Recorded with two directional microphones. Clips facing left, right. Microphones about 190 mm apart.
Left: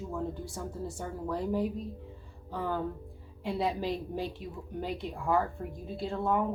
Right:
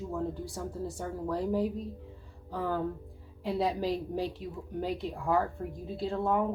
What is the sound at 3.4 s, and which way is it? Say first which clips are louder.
A woman's voice: right 1 dB; 40° right (ahead or behind).